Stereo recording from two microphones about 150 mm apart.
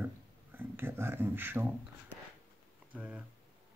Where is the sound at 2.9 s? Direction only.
10° right (ahead or behind).